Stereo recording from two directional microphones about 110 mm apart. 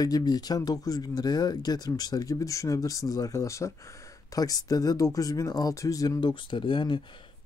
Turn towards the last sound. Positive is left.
turn(degrees=45)  # may be behind; listen again after turning